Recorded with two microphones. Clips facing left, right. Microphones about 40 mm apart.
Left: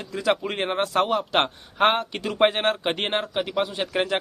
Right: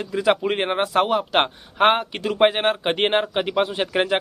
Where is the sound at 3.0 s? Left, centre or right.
Right.